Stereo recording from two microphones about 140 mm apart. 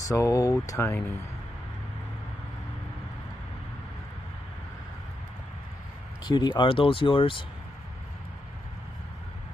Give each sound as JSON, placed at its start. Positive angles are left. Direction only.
{"t": 0.1, "sound": "speech", "side_deg": 25}
{"t": 6.2, "sound": "speech", "side_deg": 30}